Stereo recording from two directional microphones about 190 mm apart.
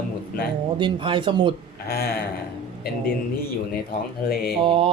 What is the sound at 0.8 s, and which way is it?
Speech, 25° right (ahead or behind).